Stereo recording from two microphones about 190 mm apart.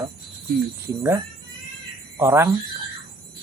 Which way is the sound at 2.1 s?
15° right (ahead or behind).